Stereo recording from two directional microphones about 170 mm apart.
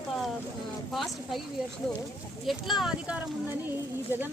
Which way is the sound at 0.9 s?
Centre (ahead or behind).